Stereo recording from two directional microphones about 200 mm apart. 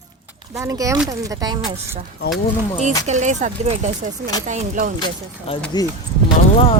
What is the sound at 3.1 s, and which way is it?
Speech, 35° right (ahead or behind).